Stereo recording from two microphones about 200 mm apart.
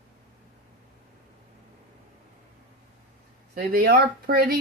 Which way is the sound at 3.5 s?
50° right (ahead or behind).